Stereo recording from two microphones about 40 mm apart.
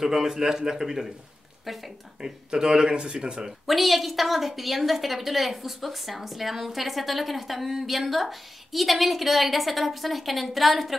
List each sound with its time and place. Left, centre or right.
0.0 s a man's voice: centre
2.2 s speech: centre
3.6 s a woman's voice: centre